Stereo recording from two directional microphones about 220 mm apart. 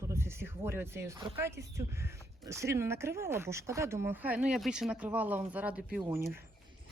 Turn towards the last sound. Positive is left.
turn(degrees=-10)  # may be behind; listen again after turning